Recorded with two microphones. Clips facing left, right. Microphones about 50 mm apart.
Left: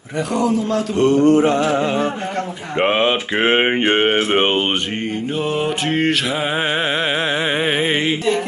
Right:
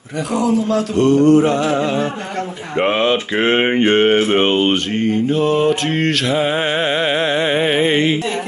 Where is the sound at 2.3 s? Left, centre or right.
Centre.